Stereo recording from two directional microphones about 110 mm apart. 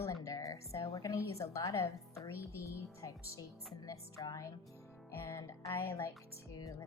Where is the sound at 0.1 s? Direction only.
30° left (ahead or behind).